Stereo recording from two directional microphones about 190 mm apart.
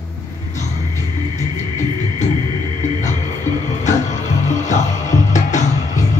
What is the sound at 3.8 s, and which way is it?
Music, 40° left (ahead or behind).